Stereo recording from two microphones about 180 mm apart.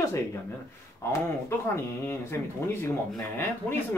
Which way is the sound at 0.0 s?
15° left (ahead or behind).